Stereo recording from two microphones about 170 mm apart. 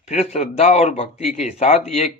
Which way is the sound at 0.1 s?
40° left (ahead or behind).